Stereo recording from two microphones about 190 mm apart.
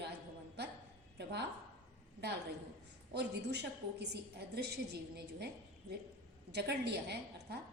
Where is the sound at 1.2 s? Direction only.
60° right (ahead or behind).